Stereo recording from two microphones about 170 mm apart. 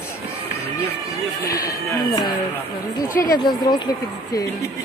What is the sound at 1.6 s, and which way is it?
Speech, 25° left (ahead or behind).